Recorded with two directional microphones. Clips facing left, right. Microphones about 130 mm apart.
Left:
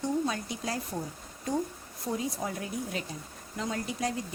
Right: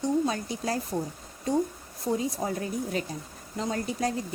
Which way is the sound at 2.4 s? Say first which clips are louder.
Right 4 dB; 35° right (ahead or behind).